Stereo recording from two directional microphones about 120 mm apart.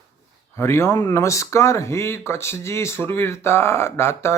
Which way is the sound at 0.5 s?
20° left (ahead or behind).